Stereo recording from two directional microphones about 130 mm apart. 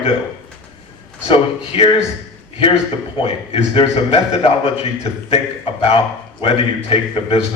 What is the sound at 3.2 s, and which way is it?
A man's voice, 45° left (ahead or behind).